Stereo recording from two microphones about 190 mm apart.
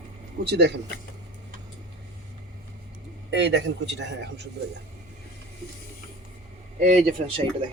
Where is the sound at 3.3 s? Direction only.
65° right (ahead or behind).